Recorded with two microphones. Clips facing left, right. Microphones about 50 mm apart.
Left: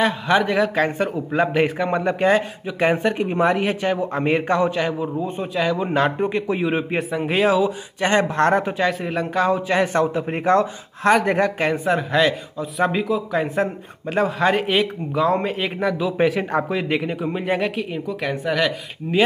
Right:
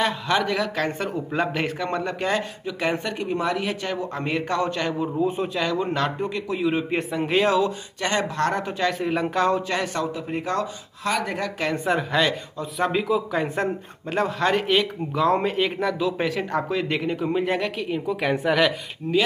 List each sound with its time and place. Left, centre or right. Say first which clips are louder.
0.0 s a man's voice: left 4 dB; centre
4.6 s speech: left 3 dB; centre
7.0 s speech: left 3 dB; centre
8.0 s a man's voice: left 6 dB; left
8.9 s speech: left 1 dB; centre
9.9 s speech: left 6 dB; left
11.7 s speech: left 3 dB; centre
18.0 s speech: right 4 dB; centre